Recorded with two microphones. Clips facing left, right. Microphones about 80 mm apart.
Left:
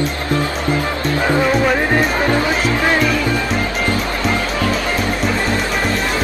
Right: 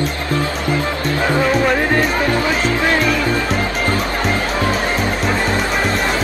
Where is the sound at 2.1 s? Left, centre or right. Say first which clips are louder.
Left 1 dB; left.